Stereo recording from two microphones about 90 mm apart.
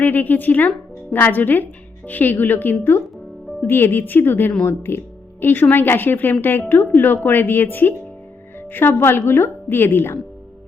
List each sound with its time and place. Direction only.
0.0 s speech: 20° left (ahead or behind)